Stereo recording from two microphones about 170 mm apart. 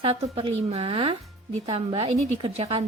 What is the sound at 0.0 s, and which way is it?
A woman's voice, 35° right (ahead or behind).